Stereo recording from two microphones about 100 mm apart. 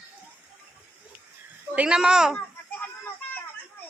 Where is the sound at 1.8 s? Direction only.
10° right (ahead or behind).